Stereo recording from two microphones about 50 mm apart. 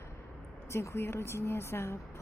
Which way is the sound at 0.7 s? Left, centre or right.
Left.